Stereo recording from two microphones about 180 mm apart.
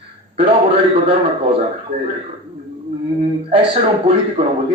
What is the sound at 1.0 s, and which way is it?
Speech, 30° right (ahead or behind).